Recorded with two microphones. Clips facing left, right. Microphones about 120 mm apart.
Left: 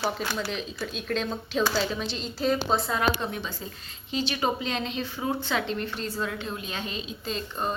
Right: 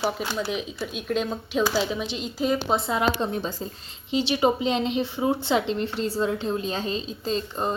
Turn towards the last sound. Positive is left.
turn(degrees=-25)  # may be behind; listen again after turning